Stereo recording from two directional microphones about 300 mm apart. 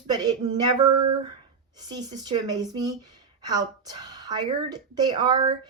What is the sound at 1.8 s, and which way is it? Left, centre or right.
A woman's voice, centre.